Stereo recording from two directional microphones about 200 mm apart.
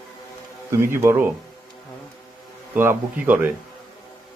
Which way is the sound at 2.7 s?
10° right (ahead or behind).